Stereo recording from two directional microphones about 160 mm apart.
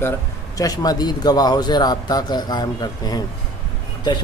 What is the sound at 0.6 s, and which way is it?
A man's voice, 25° left (ahead or behind).